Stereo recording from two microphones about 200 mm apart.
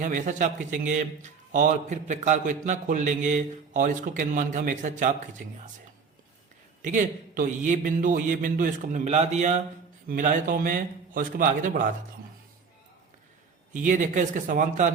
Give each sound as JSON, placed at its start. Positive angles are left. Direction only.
{"t": 0.0, "sound": "a man's voice", "side_deg": -40}
{"t": 6.8, "sound": "a man's voice", "side_deg": -40}
{"t": 13.8, "sound": "a man's voice", "side_deg": -40}